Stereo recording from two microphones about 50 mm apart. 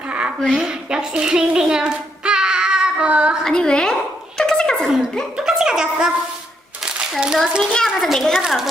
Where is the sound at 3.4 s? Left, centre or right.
Centre.